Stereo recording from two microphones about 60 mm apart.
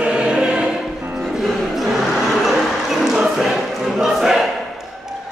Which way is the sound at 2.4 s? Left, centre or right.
Centre.